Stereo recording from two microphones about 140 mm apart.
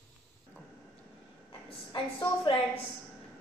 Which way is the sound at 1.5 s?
40° left (ahead or behind).